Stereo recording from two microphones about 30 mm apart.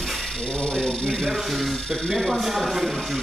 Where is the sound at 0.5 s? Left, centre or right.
Left.